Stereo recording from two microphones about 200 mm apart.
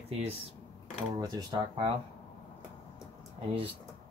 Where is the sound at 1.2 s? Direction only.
20° right (ahead or behind).